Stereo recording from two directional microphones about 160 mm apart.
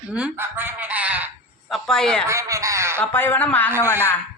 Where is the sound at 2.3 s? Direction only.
20° right (ahead or behind).